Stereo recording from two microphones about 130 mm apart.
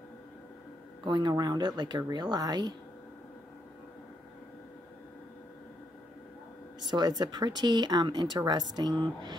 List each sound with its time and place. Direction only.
1.0 s speech: 35° right (ahead or behind)
6.9 s speech: 30° right (ahead or behind)